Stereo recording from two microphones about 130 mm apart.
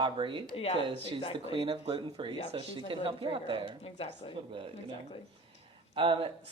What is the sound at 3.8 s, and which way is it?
Speech, 50° left (ahead or behind).